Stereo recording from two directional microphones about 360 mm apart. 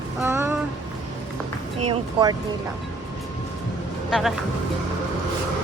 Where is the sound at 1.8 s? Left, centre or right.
Centre.